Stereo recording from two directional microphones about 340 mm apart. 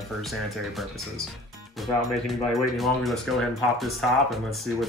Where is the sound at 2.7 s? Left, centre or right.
Centre.